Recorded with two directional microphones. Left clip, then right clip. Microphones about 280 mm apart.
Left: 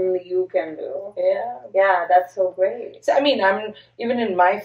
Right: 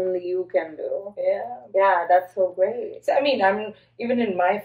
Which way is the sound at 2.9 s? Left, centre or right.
Centre.